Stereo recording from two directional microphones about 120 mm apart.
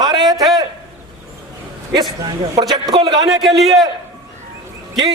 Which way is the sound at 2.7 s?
35° right (ahead or behind).